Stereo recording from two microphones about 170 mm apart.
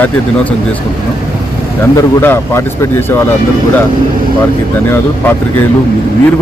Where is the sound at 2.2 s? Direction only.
15° left (ahead or behind).